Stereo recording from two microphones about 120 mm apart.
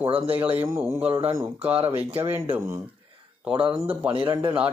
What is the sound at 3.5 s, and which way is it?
Speech, 45° right (ahead or behind).